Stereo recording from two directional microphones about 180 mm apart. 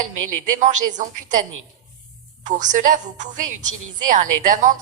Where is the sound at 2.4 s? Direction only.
45° right (ahead or behind).